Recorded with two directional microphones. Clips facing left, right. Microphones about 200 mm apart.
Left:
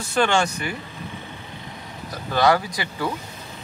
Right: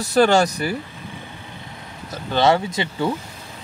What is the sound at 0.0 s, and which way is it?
Speech, 40° right (ahead or behind).